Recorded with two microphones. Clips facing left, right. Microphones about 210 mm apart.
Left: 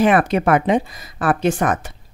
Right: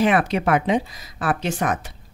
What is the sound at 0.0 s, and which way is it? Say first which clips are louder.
Speech: left 4 dB; 50° left (ahead or behind).